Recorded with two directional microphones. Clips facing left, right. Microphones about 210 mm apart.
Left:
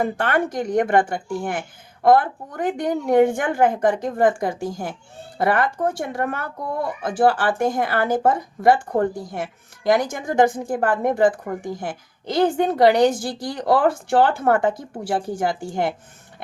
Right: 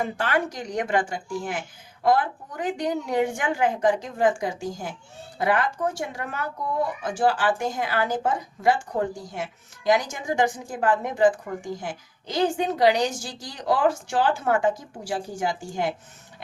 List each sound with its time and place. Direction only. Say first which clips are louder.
0.0 s a woman's voice: left 4 dB; 55° left (ahead or behind)